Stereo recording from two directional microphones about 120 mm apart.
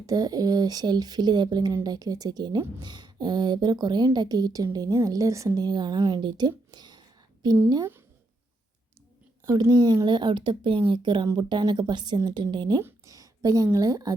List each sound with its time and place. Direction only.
0.0 s a woman's voice: 30° right (ahead or behind)
6.7 s a sound: 35° right (ahead or behind)
7.4 s a woman's voice: 35° right (ahead or behind)
9.5 s a woman's voice: 35° right (ahead or behind)
13.1 s a sound: 30° right (ahead or behind)
13.7 s a woman's voice: 30° right (ahead or behind)